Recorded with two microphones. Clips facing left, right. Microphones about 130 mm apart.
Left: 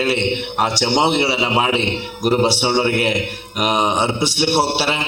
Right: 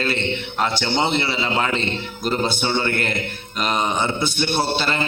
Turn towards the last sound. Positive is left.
turn(degrees=75)  # may be behind; listen again after turning